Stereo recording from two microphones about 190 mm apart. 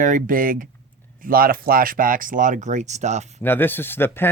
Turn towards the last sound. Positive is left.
turn(degrees=10)  # may be behind; listen again after turning